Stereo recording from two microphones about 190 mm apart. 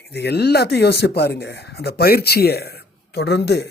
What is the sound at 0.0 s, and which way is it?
Speech, 60° left (ahead or behind).